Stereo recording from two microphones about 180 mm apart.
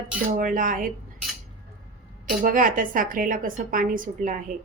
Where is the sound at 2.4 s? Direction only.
50° right (ahead or behind).